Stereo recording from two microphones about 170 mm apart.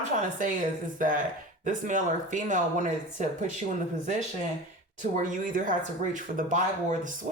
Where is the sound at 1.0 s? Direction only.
50° right (ahead or behind).